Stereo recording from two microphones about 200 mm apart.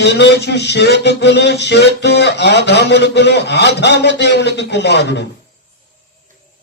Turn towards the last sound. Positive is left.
turn(degrees=60)  # may be behind; listen again after turning